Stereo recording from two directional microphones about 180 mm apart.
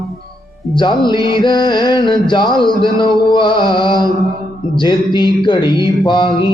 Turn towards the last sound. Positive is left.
turn(degrees=25)  # may be behind; listen again after turning